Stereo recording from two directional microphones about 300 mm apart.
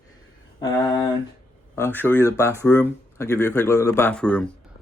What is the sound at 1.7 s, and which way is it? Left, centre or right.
Speech, centre.